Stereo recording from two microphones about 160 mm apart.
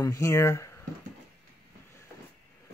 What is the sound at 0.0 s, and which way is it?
Speech, 20° left (ahead or behind).